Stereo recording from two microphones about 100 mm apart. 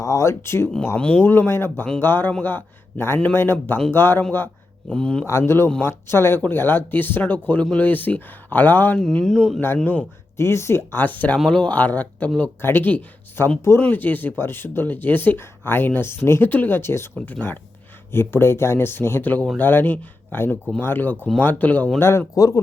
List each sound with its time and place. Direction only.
0.0 s speech: 30° left (ahead or behind)
0.9 s speech: 10° left (ahead or behind)
5.2 s speech: 25° left (ahead or behind)
9.0 s speech: 5° left (ahead or behind)
10.3 s speech: 25° left (ahead or behind)
18.1 s speech: 25° left (ahead or behind)
22.4 s speech: 35° left (ahead or behind)